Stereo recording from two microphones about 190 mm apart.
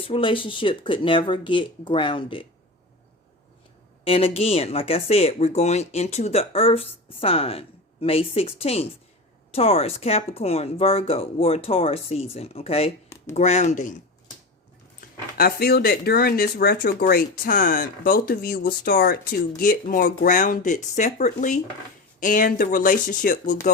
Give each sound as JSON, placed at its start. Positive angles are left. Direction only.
{"t": 0.0, "sound": "speech", "side_deg": 30}
{"t": 4.0, "sound": "speech", "side_deg": 30}
{"t": 15.4, "sound": "speech", "side_deg": 55}